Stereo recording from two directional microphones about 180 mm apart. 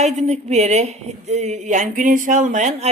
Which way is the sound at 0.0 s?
40° right (ahead or behind).